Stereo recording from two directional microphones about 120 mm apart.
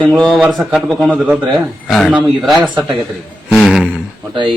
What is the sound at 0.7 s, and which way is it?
Speech, centre (ahead or behind).